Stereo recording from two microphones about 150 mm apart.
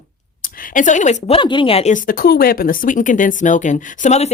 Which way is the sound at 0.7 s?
55° left (ahead or behind).